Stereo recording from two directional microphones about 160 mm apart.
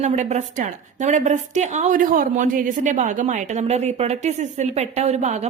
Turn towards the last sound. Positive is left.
turn(degrees=-45)  # may be behind; listen again after turning